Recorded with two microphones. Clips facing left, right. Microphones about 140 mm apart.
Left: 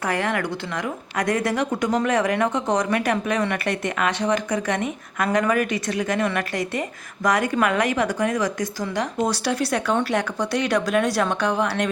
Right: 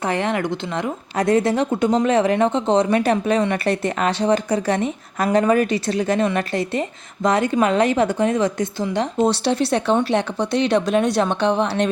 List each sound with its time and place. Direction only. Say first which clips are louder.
0.1 s a woman's voice: right 2 dB; 20° right (ahead or behind)